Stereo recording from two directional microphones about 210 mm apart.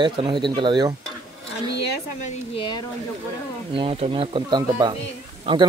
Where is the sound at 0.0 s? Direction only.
20° right (ahead or behind).